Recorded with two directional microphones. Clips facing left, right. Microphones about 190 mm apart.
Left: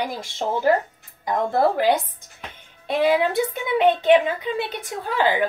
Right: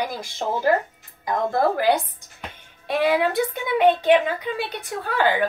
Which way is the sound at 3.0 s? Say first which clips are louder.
Left 1 dB; 25° left (ahead or behind).